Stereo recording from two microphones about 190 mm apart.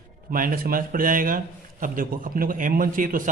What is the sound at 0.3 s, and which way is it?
Speech, 50° right (ahead or behind).